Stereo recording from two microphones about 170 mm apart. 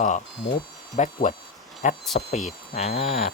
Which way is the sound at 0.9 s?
40° left (ahead or behind).